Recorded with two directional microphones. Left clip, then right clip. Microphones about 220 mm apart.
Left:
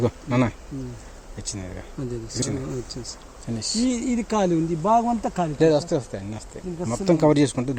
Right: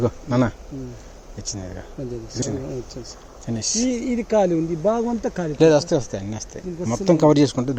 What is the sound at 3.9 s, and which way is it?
Speech, 35° left (ahead or behind).